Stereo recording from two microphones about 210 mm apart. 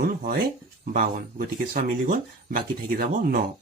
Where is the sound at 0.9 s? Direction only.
40° right (ahead or behind).